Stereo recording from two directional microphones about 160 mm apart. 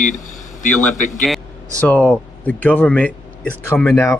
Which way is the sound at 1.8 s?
10° left (ahead or behind).